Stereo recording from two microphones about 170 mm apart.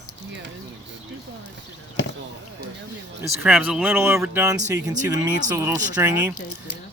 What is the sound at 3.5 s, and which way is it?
Speech, centre (ahead or behind).